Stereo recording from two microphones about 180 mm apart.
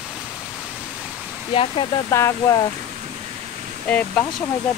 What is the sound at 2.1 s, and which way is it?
Speech, 15° left (ahead or behind).